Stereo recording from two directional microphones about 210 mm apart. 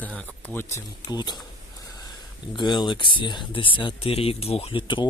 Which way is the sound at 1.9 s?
20° left (ahead or behind).